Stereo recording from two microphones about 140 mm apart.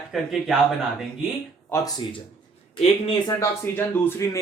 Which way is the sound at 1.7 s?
15° left (ahead or behind).